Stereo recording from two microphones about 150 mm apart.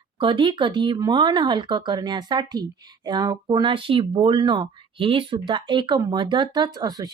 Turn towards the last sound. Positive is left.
turn(degrees=-25)  # may be behind; listen again after turning